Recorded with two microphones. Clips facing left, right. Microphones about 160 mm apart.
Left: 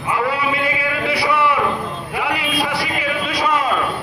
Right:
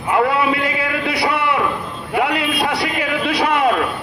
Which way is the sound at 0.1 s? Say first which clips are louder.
Right 4 dB; 60° right (ahead or behind).